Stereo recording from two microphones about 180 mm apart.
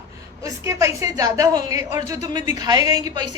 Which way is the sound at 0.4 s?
15° right (ahead or behind).